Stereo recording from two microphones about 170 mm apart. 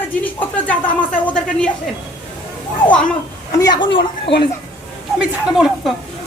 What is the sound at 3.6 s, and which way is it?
Speech, 30° left (ahead or behind).